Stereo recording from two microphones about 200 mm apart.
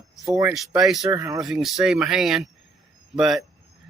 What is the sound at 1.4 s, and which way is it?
Speech, centre (ahead or behind).